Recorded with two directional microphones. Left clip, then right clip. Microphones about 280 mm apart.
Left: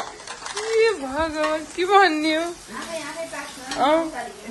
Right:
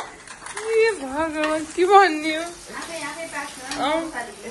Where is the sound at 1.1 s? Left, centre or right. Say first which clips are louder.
Even; centre.